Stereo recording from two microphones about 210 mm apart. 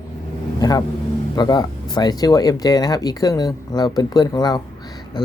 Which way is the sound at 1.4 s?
20° left (ahead or behind).